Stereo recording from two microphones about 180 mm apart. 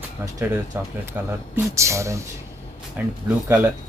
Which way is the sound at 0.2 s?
10° right (ahead or behind).